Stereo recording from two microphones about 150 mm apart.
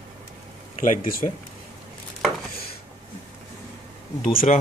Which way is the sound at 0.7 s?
60° left (ahead or behind).